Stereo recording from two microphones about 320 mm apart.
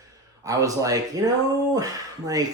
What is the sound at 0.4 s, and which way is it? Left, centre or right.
Speech, centre.